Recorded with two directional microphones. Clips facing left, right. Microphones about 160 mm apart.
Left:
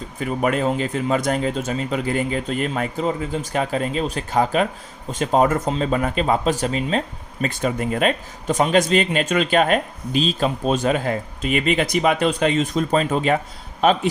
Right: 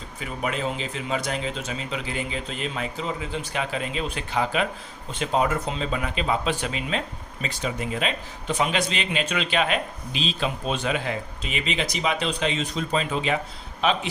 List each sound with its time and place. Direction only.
0.2 s speech: 50° left (ahead or behind)
7.4 s speech: 50° left (ahead or behind)